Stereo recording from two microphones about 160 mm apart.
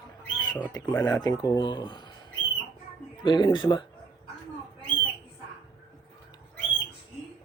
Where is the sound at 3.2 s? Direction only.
30° left (ahead or behind).